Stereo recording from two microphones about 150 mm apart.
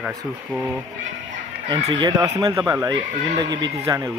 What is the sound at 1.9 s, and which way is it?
Speech, 30° right (ahead or behind).